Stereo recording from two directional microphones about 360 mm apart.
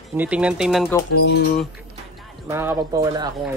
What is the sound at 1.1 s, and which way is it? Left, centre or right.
Speech, left.